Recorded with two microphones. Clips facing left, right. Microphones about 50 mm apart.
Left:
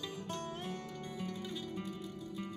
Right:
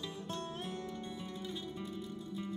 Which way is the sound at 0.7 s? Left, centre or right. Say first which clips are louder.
Right 1 dB; left.